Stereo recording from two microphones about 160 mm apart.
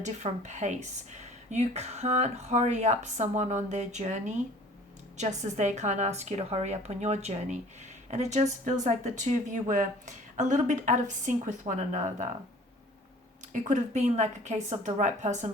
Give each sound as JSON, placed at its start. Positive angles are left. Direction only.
{"t": 0.0, "sound": "speech", "side_deg": -45}
{"t": 13.5, "sound": "speech", "side_deg": -50}